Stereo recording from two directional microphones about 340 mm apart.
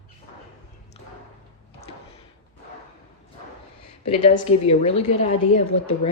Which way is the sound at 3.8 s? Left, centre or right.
Centre.